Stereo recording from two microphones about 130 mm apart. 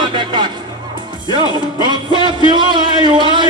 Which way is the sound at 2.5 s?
35° right (ahead or behind).